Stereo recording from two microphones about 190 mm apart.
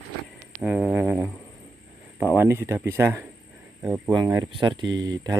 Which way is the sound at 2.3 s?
10° right (ahead or behind).